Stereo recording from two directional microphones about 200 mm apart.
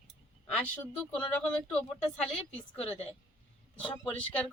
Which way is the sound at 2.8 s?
30° left (ahead or behind).